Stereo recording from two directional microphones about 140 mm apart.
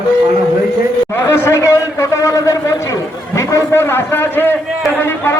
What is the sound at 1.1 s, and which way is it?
A man's voice, 15° left (ahead or behind).